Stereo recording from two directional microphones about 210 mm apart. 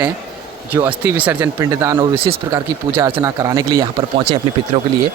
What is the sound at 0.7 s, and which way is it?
Speech, 10° right (ahead or behind).